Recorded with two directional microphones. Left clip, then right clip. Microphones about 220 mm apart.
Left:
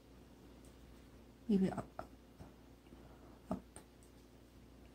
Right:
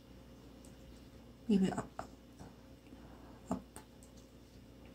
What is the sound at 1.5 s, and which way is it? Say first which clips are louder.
Speech: right 2 dB; 30° left (ahead or behind).